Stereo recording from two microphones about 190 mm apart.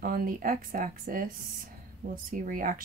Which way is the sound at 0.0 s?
50° right (ahead or behind).